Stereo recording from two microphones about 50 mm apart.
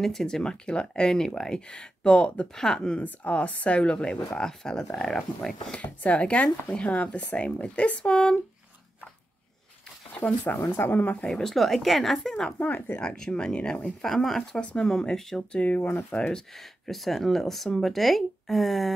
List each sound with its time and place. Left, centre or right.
0.0 s speech: centre; by 2.4 s left
2.5 s speech: centre
3.0 s speech: left; by 5.8 s centre
5.8 s speech: left
10.6 s speech: left
10.9 s speech: left
11.2 s speech: centre
12.5 s speech: left
13.0 s speech: centre
14.0 s speech: centre
14.6 s speech: left
14.9 s speech: centre
15.5 s speech: left
16.1 s speech: centre